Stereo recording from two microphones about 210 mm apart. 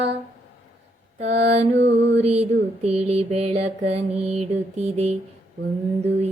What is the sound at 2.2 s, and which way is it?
Mantra, 30° right (ahead or behind).